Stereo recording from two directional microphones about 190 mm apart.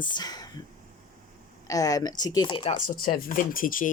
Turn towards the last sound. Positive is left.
turn(degrees=45)  # may be behind; listen again after turning